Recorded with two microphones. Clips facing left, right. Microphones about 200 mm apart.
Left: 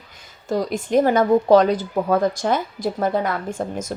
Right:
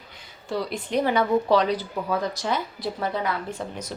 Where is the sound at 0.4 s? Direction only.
45° left (ahead or behind).